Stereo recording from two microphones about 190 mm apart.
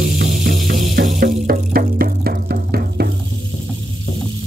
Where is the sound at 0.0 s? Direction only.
60° right (ahead or behind).